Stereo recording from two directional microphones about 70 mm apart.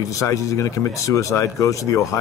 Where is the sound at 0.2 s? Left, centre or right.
Left.